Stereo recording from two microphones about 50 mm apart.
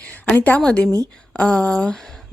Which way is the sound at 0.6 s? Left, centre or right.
Centre.